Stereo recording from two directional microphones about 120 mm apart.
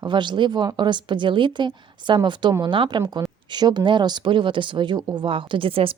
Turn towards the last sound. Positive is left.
turn(degrees=-50)  # may be behind; listen again after turning